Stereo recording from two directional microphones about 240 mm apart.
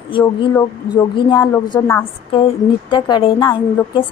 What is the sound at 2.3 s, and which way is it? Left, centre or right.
A woman's voice, left.